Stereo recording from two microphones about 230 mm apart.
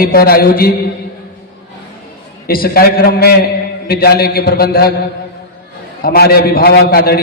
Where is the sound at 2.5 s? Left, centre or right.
Left.